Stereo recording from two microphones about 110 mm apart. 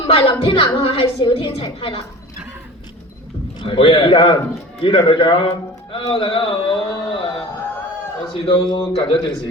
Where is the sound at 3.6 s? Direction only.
55° left (ahead or behind).